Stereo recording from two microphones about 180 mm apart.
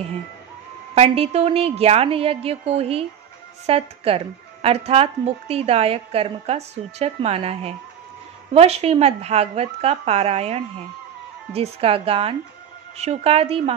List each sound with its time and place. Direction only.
0.9 s speech: 35° right (ahead or behind)